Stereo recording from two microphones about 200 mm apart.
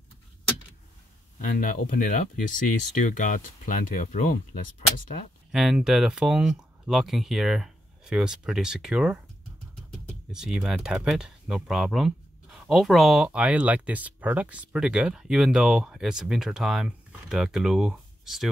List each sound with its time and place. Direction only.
1.4 s speech: 40° left (ahead or behind)
5.5 s speech: centre (ahead or behind)
10.3 s speech: 5° right (ahead or behind)